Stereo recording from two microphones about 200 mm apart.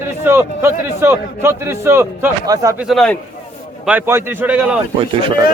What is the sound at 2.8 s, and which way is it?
Speech, centre (ahead or behind).